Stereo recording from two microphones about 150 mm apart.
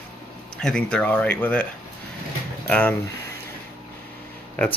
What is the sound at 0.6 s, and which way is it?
Speech, 5° left (ahead or behind).